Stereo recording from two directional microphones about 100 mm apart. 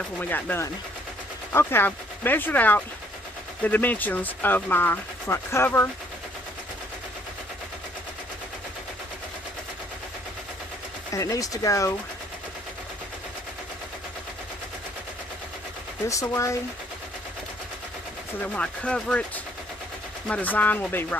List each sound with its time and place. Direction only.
0.2 s speech: 20° left (ahead or behind)
11.1 s speech: 35° left (ahead or behind)
16.0 s speech: 30° left (ahead or behind)
18.4 s speech: 10° left (ahead or behind)